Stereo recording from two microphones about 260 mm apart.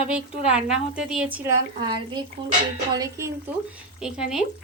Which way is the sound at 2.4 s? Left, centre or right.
Centre.